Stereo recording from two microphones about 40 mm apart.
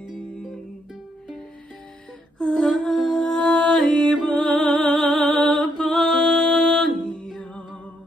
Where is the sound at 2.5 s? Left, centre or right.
Centre.